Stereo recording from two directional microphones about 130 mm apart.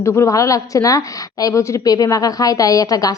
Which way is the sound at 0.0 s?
20° left (ahead or behind).